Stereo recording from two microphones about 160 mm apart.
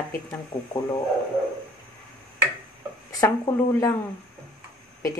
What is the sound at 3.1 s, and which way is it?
Speech, 20° left (ahead or behind).